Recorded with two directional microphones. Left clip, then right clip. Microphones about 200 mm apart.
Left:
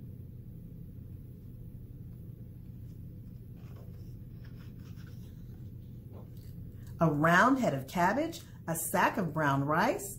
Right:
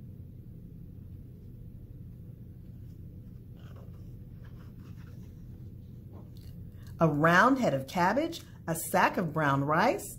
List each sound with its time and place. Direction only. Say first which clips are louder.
7.0 s speech: right 2 dB; 40° right (ahead or behind)